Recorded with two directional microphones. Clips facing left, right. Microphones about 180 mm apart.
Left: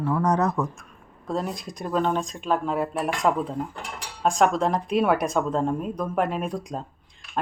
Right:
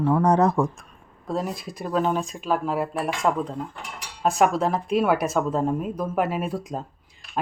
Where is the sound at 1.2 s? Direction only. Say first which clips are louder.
Right 1 dB; centre (ahead or behind).